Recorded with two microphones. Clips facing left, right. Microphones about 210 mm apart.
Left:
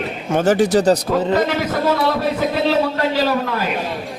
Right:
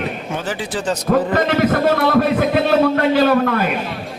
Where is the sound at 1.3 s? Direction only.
55° right (ahead or behind).